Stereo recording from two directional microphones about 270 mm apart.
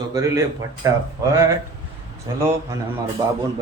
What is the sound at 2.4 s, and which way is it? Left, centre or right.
Speech, centre.